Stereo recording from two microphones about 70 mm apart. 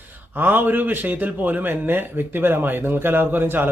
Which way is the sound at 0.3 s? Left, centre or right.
Right.